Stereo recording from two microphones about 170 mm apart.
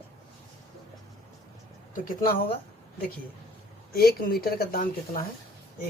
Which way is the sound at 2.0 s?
55° left (ahead or behind).